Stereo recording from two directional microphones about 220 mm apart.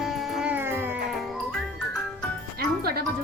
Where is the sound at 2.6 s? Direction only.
45° right (ahead or behind).